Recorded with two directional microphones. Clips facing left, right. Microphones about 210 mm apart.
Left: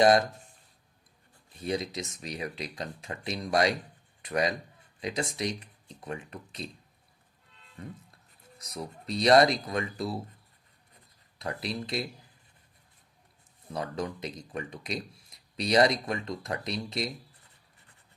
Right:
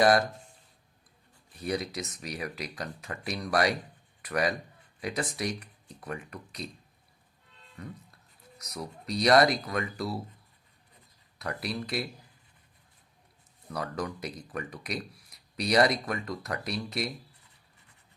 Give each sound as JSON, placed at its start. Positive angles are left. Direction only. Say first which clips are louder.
{"t": 0.0, "sound": "speech", "louder": "left 1 dB", "side_deg": 20}
{"t": 1.5, "sound": "speech", "louder": "even", "side_deg": 25}
{"t": 7.8, "sound": "speech", "louder": "even", "side_deg": 25}
{"t": 11.3, "sound": "speech", "louder": "even", "side_deg": 25}
{"t": 13.7, "sound": "speech", "louder": "left 1 dB", "side_deg": 25}